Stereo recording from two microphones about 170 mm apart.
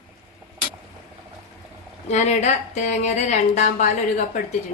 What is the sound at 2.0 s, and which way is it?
A woman's voice, 40° left (ahead or behind).